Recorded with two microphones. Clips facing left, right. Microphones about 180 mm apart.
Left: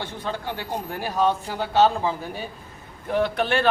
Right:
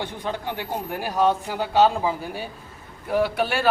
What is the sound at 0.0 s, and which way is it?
A man's voice, 15° right (ahead or behind).